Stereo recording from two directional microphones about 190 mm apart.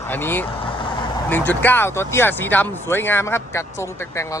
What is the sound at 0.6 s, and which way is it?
Vehicle, 25° left (ahead or behind).